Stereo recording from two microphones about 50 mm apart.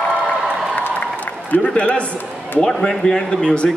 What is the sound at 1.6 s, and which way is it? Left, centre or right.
Speech, left.